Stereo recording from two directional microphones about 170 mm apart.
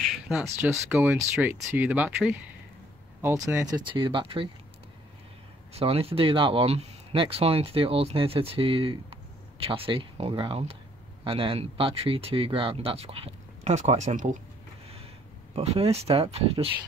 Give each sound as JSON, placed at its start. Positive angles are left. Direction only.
{"t": 0.3, "sound": "speech", "side_deg": -5}
{"t": 5.7, "sound": "speech", "side_deg": -35}
{"t": 15.5, "sound": "speech", "side_deg": -35}